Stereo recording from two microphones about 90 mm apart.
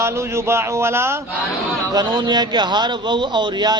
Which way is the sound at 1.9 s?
50° right (ahead or behind).